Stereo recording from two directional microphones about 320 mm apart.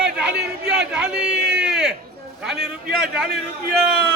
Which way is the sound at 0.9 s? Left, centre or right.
Centre.